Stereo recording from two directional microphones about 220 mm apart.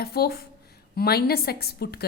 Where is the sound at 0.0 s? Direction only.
45° left (ahead or behind).